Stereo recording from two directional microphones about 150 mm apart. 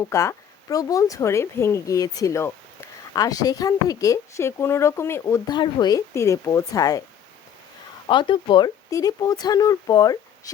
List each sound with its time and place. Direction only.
0.0 s speech: 20° left (ahead or behind)
5.5 s speech: 30° left (ahead or behind)
8.0 s speech: 35° left (ahead or behind)